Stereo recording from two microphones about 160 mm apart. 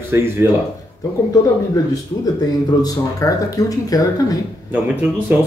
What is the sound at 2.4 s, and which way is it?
Speech, 25° left (ahead or behind).